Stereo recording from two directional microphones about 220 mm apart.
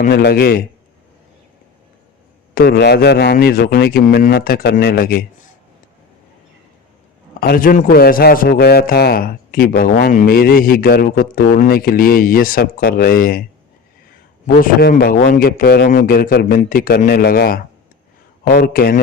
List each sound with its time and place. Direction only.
0.0 s speech: 45° left (ahead or behind)
2.6 s speech: 45° left (ahead or behind)
7.3 s a man's voice: 40° left (ahead or behind)
14.4 s a man's voice: 40° left (ahead or behind)